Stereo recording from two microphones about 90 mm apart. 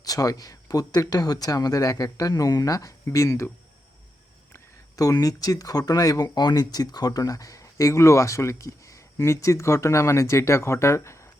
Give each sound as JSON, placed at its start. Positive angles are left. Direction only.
{"t": 0.0, "sound": "speech", "side_deg": 40}
{"t": 4.9, "sound": "speech", "side_deg": 40}